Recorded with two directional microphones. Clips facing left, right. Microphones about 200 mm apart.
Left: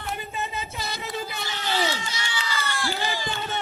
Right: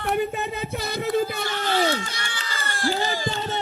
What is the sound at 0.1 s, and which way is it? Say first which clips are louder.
Music: right 9 dB; 60° right (ahead or behind).